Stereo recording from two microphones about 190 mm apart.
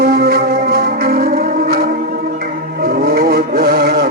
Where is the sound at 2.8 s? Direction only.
55° right (ahead or behind).